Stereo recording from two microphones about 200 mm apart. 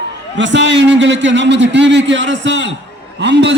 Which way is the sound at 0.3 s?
65° right (ahead or behind).